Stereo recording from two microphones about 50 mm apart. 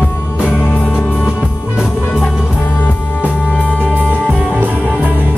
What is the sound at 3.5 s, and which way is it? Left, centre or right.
Music, left.